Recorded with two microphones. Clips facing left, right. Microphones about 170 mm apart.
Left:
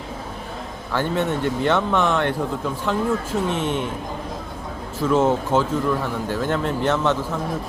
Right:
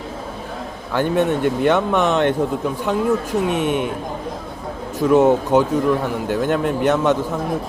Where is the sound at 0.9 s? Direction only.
15° right (ahead or behind).